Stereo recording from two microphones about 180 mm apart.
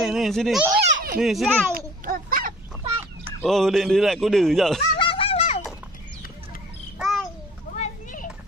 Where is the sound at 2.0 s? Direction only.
50° right (ahead or behind).